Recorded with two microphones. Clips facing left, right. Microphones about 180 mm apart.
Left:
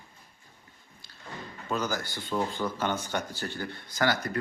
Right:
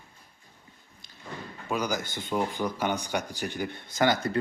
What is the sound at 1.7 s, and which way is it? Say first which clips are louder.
A man's voice: right 1 dB; 15° right (ahead or behind).